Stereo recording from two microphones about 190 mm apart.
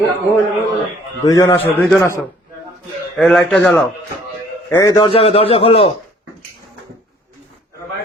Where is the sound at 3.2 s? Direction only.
Centre (ahead or behind).